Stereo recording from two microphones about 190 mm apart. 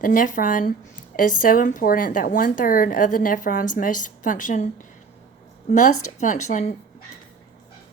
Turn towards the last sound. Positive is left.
turn(degrees=40)  # may be behind; listen again after turning